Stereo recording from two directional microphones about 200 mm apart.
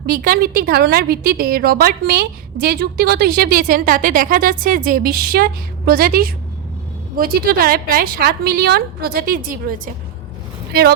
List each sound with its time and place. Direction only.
0.0 s a woman's voice: 45° right (ahead or behind)